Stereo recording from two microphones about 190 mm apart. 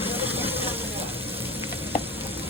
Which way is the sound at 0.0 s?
10° right (ahead or behind).